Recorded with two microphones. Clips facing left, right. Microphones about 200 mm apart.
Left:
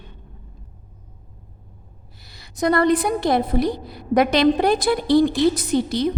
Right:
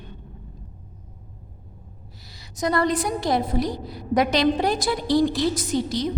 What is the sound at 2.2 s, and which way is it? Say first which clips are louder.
A woman's voice: left 5 dB; 60° left (ahead or behind).